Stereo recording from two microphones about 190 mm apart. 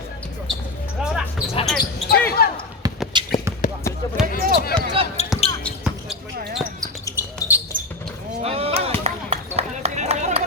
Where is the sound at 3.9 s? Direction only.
15° left (ahead or behind).